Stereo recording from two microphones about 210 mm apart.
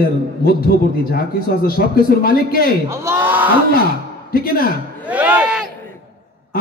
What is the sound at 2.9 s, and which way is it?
Speech, 10° right (ahead or behind).